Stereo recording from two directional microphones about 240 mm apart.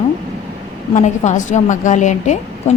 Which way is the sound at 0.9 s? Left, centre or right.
Left.